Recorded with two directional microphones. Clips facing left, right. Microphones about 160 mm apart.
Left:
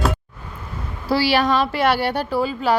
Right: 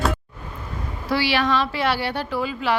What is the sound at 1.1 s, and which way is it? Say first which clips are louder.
Speech: left 3 dB; 35° left (ahead or behind).